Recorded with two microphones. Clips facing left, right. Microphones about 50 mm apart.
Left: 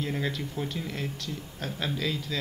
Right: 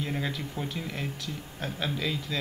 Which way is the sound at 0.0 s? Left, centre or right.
Centre.